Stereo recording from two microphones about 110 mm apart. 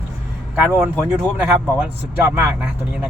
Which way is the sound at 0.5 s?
15° right (ahead or behind).